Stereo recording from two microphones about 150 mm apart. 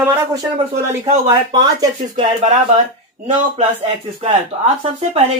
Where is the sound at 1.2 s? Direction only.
25° right (ahead or behind).